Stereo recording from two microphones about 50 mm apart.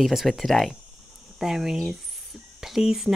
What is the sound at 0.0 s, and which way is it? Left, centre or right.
Speech, centre.